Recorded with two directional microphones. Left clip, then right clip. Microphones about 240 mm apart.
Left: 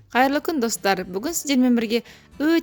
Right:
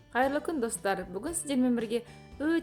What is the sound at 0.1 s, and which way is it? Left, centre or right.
A woman's voice, left.